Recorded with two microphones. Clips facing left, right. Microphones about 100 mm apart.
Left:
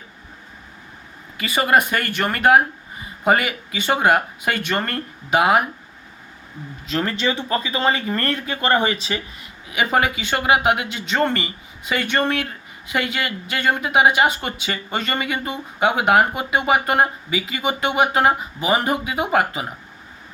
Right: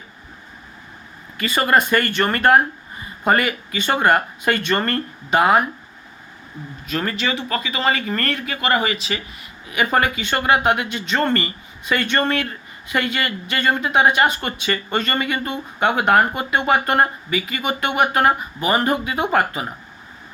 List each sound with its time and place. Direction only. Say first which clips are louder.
1.4 s speech: even; 15° left (ahead or behind)
7.2 s speech: left 1 dB; 30° left (ahead or behind)
9.6 s speech: right 1 dB; 15° left (ahead or behind)